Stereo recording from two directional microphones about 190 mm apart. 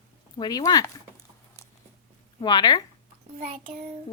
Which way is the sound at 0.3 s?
20° left (ahead or behind).